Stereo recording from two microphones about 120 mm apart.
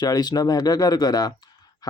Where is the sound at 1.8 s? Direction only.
35° left (ahead or behind).